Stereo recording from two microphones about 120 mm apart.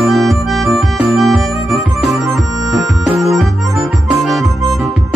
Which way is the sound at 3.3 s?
Centre (ahead or behind).